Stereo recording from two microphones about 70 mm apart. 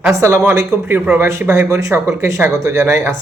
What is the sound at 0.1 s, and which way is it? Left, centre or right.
Speech, right.